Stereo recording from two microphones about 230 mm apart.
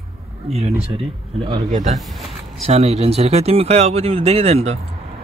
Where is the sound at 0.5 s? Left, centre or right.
Right.